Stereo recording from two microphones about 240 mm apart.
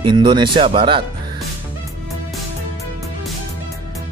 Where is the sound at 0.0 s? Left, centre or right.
Centre.